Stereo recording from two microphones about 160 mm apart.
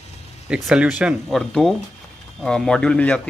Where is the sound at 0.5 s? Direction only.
5° right (ahead or behind).